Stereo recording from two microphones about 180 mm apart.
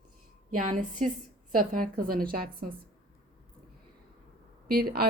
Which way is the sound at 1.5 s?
50° right (ahead or behind).